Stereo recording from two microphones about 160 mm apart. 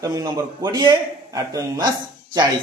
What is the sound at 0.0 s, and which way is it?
A man's voice, 25° right (ahead or behind).